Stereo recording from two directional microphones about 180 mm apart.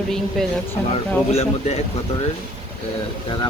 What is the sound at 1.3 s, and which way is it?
Speech, 35° left (ahead or behind).